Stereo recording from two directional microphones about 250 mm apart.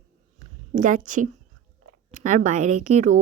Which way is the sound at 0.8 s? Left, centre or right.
Right.